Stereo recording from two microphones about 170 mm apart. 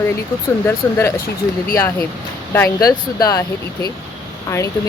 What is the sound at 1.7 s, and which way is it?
Speech, 15° left (ahead or behind).